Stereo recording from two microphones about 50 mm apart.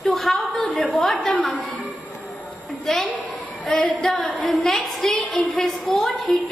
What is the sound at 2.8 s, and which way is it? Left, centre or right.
A woman's voice, centre.